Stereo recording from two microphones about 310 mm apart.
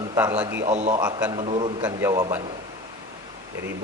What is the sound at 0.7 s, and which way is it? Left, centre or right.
Speech, right.